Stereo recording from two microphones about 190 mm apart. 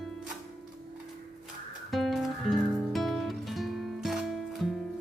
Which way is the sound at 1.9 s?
Centre (ahead or behind).